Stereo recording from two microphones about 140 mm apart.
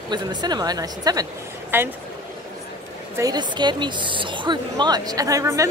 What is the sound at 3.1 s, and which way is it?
Speech, 25° right (ahead or behind).